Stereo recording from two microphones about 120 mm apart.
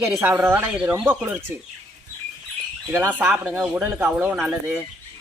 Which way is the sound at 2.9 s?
15° right (ahead or behind).